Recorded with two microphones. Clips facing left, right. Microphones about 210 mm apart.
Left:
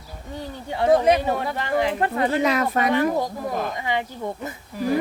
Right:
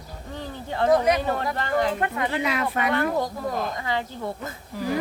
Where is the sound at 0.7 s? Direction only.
10° left (ahead or behind).